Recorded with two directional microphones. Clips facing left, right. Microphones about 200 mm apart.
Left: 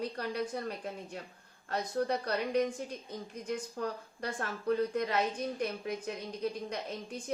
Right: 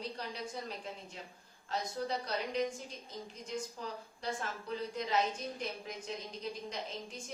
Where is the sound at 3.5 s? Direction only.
60° left (ahead or behind).